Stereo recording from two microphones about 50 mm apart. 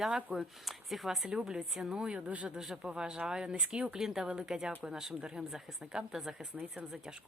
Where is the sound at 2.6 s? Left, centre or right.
Centre.